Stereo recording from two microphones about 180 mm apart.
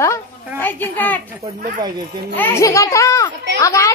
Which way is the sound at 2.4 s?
15° left (ahead or behind).